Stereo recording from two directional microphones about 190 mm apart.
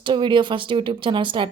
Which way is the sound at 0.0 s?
25° right (ahead or behind).